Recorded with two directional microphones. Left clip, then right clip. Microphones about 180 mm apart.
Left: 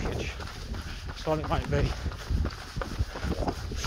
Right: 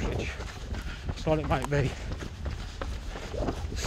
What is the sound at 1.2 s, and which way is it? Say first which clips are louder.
Speech: right 1 dB; 60° right (ahead or behind).